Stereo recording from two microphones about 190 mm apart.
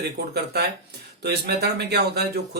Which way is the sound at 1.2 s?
60° right (ahead or behind).